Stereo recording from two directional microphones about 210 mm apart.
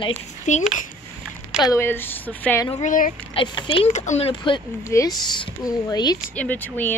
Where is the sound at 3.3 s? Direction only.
25° left (ahead or behind).